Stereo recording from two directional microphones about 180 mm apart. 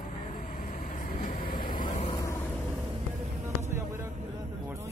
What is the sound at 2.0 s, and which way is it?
Vehicle, 25° left (ahead or behind).